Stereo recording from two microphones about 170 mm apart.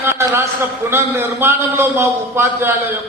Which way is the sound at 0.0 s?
15° right (ahead or behind).